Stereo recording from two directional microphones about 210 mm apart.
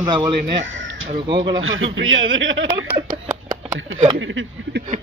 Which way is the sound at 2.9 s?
20° right (ahead or behind).